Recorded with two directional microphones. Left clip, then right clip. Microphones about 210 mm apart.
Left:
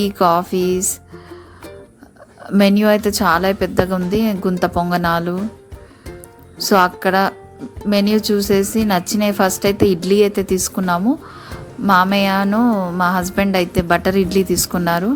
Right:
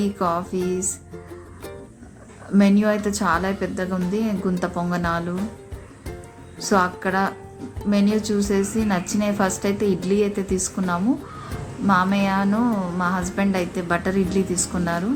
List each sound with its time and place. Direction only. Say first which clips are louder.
0.0 s speech: left 9 dB; 45° left (ahead or behind)
2.5 s a woman's voice: left 6 dB; 40° left (ahead or behind)
6.6 s a woman's voice: left 6 dB; 40° left (ahead or behind)